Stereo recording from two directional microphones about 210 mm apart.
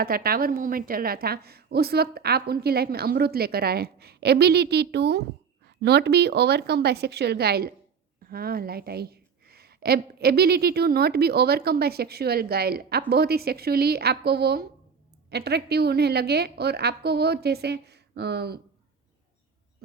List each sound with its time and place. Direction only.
0.0 s a woman's voice: 45° right (ahead or behind)